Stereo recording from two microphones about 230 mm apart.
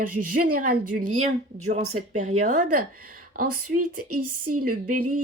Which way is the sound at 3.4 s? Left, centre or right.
Right.